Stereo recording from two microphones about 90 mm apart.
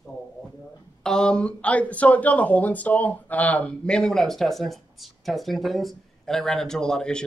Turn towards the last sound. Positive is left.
turn(degrees=10)  # may be behind; listen again after turning